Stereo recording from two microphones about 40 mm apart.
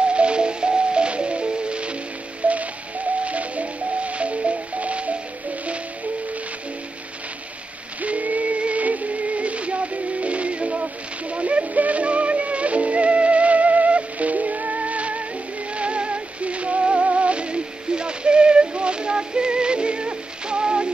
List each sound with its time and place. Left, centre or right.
0.0 s music: right
8.0 s music: right
10.2 s a sound: right
15.7 s music: right